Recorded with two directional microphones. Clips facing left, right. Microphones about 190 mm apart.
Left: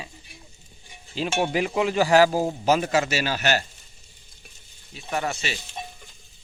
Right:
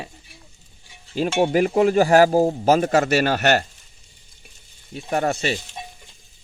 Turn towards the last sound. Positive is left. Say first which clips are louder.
# right 6 dB
turn(degrees=-50)  # may be behind; listen again after turning